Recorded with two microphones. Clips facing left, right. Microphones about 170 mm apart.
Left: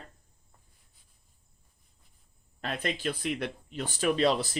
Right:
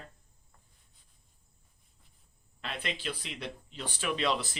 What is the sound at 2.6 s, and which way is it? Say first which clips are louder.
Speech: left 5 dB; 45° left (ahead or behind).